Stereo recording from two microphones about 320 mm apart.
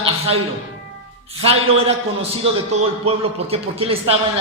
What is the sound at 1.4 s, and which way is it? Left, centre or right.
Speech, centre.